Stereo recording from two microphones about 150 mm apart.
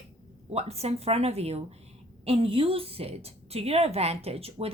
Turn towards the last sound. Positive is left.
turn(degrees=-40)  # may be behind; listen again after turning